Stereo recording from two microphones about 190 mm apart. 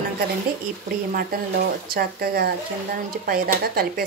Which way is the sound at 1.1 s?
50° right (ahead or behind).